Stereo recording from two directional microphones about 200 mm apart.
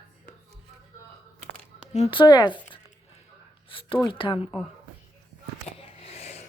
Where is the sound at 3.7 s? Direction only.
25° left (ahead or behind).